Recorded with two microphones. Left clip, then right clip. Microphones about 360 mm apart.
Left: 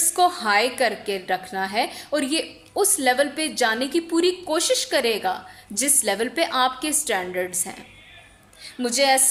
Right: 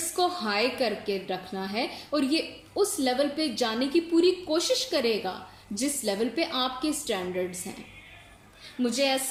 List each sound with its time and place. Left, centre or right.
0.2 s a woman's voice: left
8.6 s a woman's voice: centre